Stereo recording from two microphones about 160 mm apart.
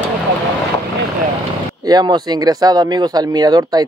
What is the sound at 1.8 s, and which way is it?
Speech, 25° right (ahead or behind).